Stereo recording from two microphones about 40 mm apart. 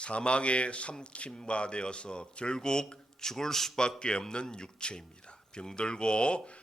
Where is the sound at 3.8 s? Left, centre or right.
Left.